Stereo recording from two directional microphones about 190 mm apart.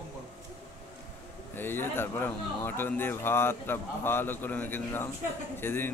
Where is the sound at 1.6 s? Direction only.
10° left (ahead or behind).